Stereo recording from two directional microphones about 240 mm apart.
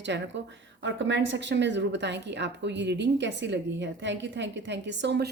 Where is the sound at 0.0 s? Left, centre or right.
Right.